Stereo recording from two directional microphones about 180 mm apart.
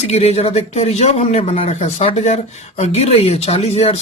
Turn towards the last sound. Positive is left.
turn(degrees=35)  # may be behind; listen again after turning